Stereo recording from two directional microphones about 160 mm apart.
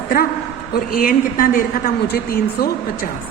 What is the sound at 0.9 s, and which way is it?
A woman's voice, 60° left (ahead or behind).